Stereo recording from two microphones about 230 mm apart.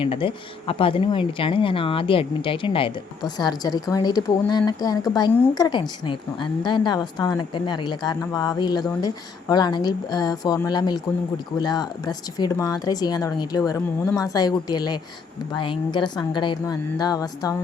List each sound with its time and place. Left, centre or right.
0.0 s a woman's voice: left